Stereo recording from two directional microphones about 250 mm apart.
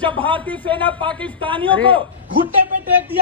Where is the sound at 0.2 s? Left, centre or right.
Centre.